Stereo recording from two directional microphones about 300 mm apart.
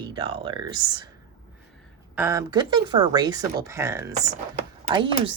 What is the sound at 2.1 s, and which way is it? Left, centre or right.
Speech, centre.